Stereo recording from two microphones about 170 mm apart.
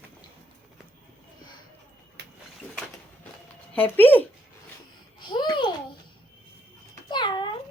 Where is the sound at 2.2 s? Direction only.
80° right.